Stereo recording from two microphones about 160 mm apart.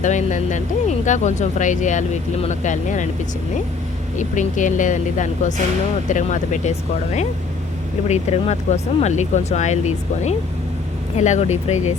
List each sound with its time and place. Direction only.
0.0 s speech: 50° left (ahead or behind)
4.2 s speech: 50° left (ahead or behind)